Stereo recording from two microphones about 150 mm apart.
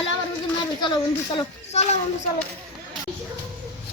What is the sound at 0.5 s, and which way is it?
Speech, 30° left (ahead or behind).